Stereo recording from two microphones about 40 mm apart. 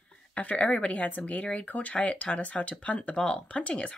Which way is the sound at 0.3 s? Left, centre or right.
Left.